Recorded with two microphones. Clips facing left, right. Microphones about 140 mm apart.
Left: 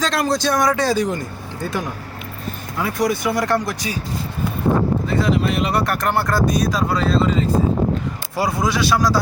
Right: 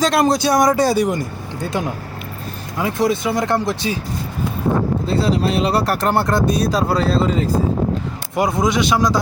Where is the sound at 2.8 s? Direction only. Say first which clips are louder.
Right 2 dB; 25° right (ahead or behind).